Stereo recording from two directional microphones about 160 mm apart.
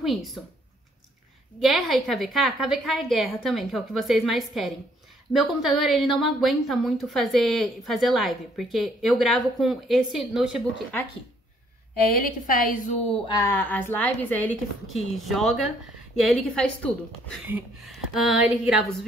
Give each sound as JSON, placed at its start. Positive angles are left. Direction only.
{"t": 0.0, "sound": "a woman's voice", "side_deg": 0}
{"t": 1.6, "sound": "a woman's voice", "side_deg": 0}
{"t": 12.1, "sound": "a woman's voice", "side_deg": 65}
{"t": 13.4, "sound": "a woman's voice", "side_deg": 15}